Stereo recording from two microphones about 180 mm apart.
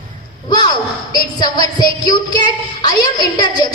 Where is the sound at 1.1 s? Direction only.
20° left (ahead or behind).